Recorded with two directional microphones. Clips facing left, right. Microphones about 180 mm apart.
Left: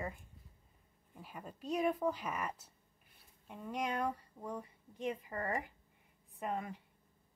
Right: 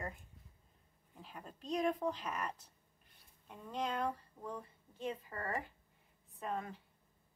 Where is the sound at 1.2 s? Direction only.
10° left (ahead or behind).